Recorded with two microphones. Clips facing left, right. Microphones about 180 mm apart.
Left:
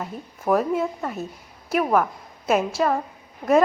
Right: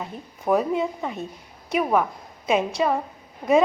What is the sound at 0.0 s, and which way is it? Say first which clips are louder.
A woman's voice: left 1 dB; centre (ahead or behind).